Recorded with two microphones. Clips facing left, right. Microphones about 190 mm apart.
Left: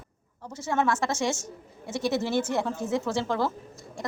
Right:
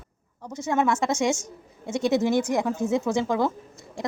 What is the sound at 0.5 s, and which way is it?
A woman's voice, 15° right (ahead or behind).